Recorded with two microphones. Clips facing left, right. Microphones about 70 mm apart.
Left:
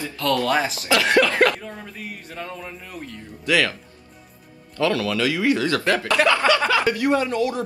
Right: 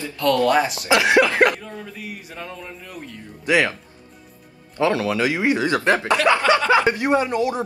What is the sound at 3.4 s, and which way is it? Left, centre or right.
Speech, right.